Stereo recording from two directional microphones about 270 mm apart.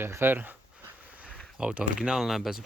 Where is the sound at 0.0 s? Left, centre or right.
Centre.